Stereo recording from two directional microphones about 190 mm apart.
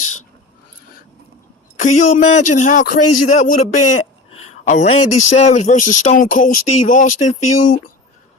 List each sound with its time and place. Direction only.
1.8 s a man's voice: 40° left (ahead or behind)
4.6 s speech: 40° left (ahead or behind)